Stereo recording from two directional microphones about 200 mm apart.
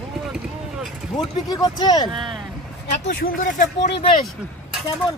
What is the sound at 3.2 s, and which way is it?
Speech, 40° left (ahead or behind).